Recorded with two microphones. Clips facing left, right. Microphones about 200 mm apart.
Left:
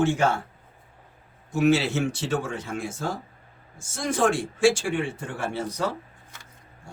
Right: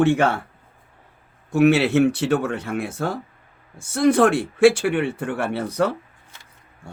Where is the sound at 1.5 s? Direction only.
65° right (ahead or behind).